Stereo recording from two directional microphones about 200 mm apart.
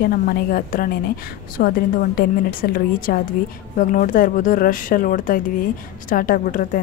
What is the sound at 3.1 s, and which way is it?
A woman's voice, 50° left (ahead or behind).